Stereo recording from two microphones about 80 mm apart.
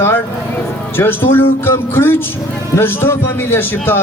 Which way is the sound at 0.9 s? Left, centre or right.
Left.